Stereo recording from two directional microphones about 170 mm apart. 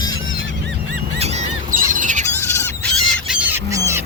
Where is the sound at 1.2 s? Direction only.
40° right (ahead or behind).